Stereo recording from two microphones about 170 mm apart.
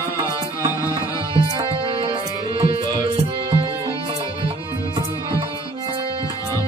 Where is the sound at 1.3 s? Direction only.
30° right (ahead or behind).